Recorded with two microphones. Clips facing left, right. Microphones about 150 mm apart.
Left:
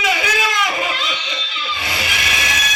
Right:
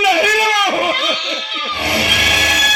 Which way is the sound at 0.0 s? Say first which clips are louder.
Right 6 dB; 60° right (ahead or behind).